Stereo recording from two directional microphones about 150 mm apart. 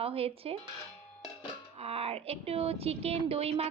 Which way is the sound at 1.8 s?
40° right (ahead or behind).